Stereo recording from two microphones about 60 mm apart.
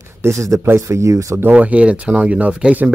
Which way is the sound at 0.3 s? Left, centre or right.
Right.